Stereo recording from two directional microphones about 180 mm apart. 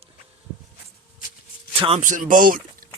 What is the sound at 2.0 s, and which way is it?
Speech, 45° right (ahead or behind).